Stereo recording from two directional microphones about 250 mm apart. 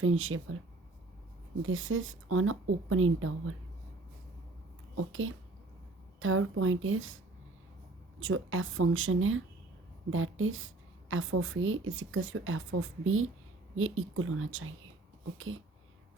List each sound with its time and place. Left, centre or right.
0.0 s a woman's voice: right
1.6 s speech: right
4.9 s a woman's voice: right
8.2 s a woman's voice: right